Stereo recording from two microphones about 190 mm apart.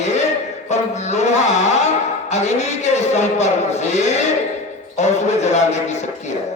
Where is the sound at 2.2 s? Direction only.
35° left (ahead or behind).